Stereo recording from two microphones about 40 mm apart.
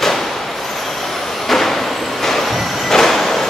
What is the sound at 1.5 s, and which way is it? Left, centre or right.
Vehicle, centre.